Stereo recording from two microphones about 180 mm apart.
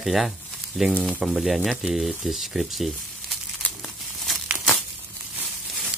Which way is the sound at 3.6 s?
5° left (ahead or behind).